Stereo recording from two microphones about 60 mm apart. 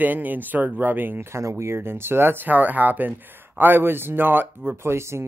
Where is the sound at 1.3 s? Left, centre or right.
Right.